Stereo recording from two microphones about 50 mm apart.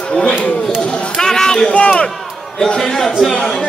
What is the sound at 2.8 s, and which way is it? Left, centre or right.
Speech, centre.